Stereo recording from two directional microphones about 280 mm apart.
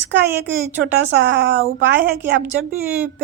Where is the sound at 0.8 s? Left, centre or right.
Right.